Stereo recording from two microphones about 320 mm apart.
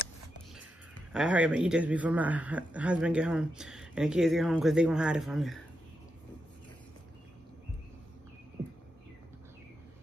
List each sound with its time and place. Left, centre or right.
1.1 s a man's voice: centre